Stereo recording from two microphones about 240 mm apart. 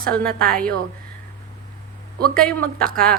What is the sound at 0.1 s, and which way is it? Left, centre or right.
Speech, centre.